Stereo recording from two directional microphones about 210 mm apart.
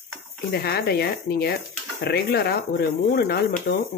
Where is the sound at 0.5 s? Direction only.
50° left (ahead or behind).